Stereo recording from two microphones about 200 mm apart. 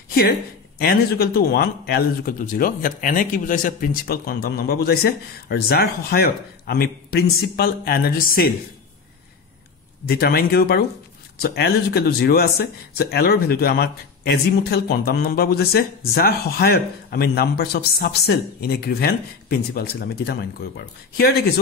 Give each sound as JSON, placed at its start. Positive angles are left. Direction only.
{"t": 0.7, "sound": "speech", "side_deg": 50}
{"t": 10.0, "sound": "speech", "side_deg": 50}